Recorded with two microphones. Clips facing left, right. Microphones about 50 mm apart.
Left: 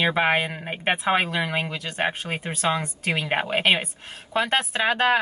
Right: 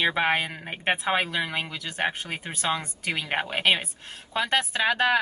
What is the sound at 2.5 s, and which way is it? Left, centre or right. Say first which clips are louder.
Speech: left 4 dB; centre.